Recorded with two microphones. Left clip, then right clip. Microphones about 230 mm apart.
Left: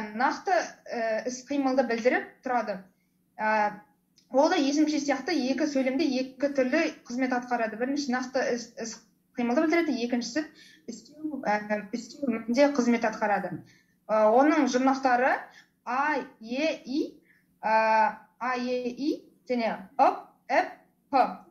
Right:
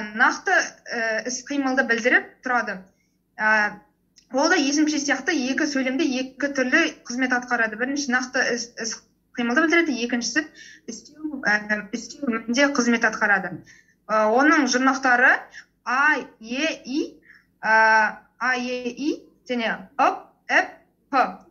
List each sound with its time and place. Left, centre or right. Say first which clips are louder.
0.1 s a woman's voice: right 7 dB; right
4.3 s a woman's voice: right 3 dB; right